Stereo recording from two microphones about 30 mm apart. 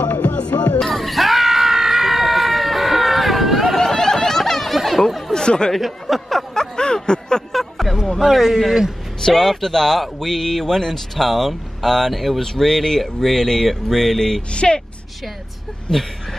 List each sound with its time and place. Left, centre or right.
0.0 s music: left
0.9 s a sound: centre
3.9 s a sound: centre
5.3 s a sound: left
5.8 s speech: centre
6.5 s a sound: left
7.5 s music: centre
8.2 s speech: centre
9.2 s speech: centre
12.4 s speech: centre
14.5 s speech: left
15.9 s speech: left